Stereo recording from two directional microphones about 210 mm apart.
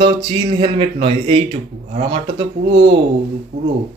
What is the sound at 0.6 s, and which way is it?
Speech, 25° right (ahead or behind).